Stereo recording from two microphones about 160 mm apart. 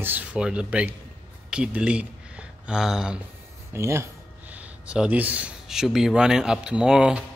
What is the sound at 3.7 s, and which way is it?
A man's voice, 15° right (ahead or behind).